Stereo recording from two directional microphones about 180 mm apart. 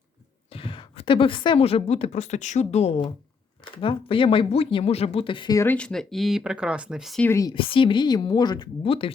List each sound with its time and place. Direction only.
0.5 s a woman's voice: 30° left (ahead or behind)
5.6 s speech: 5° left (ahead or behind)
7.3 s speech: 15° left (ahead or behind)
7.5 s speech: 30° left (ahead or behind)